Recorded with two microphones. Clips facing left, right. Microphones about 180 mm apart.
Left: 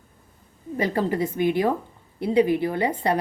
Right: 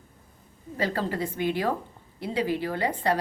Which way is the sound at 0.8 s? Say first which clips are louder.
Left 5 dB; 15° left (ahead or behind).